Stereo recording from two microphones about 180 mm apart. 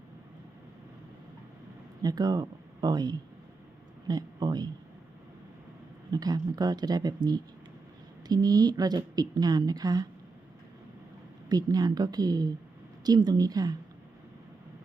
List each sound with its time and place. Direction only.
2.0 s a woman's voice: 20° right (ahead or behind)
6.1 s a woman's voice: 20° right (ahead or behind)
11.4 s a woman's voice: 20° right (ahead or behind)